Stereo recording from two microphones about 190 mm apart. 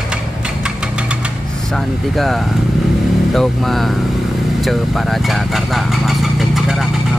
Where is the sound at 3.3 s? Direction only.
Centre (ahead or behind).